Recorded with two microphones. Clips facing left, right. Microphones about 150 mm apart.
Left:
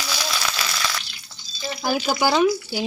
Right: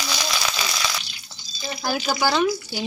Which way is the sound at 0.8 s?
10° right (ahead or behind).